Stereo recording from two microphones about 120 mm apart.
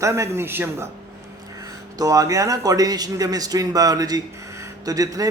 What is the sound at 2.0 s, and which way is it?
A man's voice, 30° right (ahead or behind).